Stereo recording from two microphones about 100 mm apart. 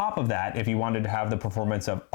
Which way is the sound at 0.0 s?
25° left (ahead or behind).